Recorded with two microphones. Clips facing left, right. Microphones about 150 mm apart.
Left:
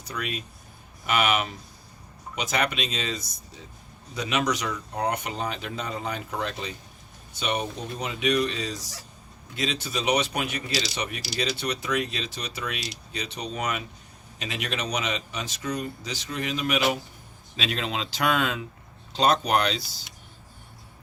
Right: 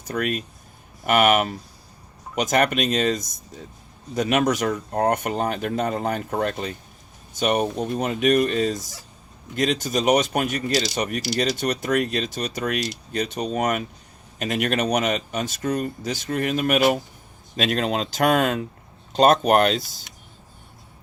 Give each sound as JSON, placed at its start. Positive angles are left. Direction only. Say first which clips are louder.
{"t": 0.1, "sound": "speech", "louder": "right 8 dB", "side_deg": -50}